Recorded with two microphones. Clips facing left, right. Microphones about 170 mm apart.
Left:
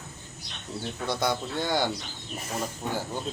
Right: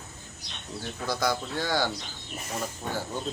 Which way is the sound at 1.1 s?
25° left (ahead or behind).